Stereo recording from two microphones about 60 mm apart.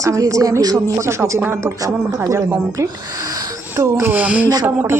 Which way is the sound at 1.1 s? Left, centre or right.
Right.